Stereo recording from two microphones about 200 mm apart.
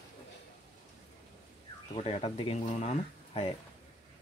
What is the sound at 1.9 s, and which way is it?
A man's voice, 30° left (ahead or behind).